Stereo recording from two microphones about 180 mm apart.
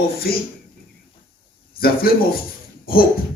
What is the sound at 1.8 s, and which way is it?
Speech, 55° left (ahead or behind).